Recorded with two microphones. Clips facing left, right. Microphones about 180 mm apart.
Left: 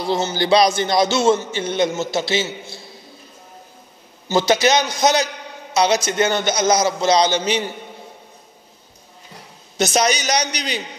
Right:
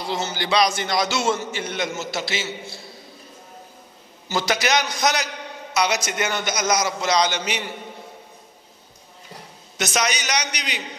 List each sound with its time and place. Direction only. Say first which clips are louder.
0.0 s a man's voice: left 6 dB; 30° left (ahead or behind)
4.3 s a man's voice: left 6 dB; 25° left (ahead or behind)
9.8 s a man's voice: left 6 dB; 30° left (ahead or behind)